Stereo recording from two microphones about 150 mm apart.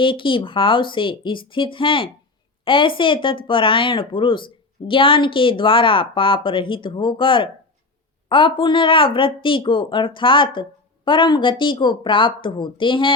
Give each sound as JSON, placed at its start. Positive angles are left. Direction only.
{"t": 0.0, "sound": "a woman's voice", "side_deg": 35}